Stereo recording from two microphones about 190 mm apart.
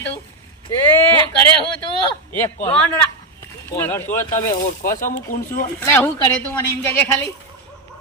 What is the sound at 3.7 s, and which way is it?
Speech, 15° left (ahead or behind).